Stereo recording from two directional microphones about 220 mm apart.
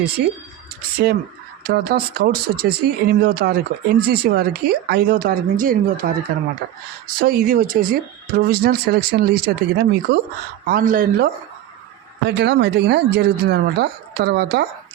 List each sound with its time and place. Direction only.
0.2 s speech: 45° right (ahead or behind)
12.2 s speech: 50° right (ahead or behind)